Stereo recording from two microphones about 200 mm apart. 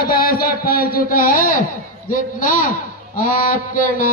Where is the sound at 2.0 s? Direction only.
45° left (ahead or behind).